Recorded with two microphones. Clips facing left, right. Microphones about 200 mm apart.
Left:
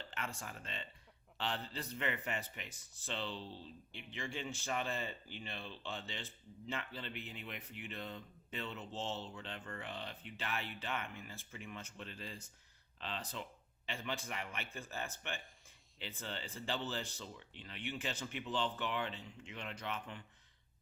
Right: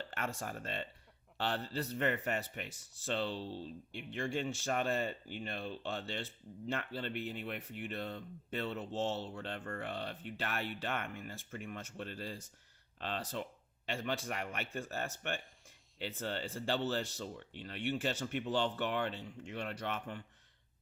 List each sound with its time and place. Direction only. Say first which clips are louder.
0.1 s speech: right 3 dB; 45° right (ahead or behind)
2.6 s speech: right 5 dB; 80° right
3.0 s speech: right 6 dB; 45° right (ahead or behind)